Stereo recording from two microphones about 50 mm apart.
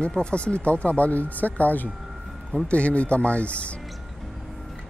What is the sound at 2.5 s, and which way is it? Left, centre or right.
Speech, left.